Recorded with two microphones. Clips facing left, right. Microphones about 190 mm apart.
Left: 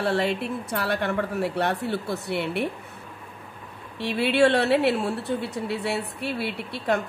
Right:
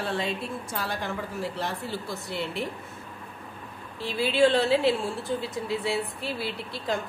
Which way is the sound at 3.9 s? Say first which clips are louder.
Left 3 dB; 70° left (ahead or behind).